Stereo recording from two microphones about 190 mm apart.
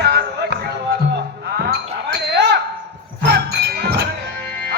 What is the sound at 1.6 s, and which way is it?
Basketball bounce, 65° right (ahead or behind).